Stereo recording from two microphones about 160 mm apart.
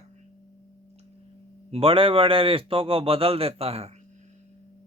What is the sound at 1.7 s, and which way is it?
A man's voice, 35° right (ahead or behind).